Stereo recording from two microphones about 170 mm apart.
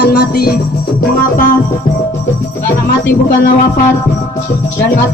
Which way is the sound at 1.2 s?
55° left (ahead or behind).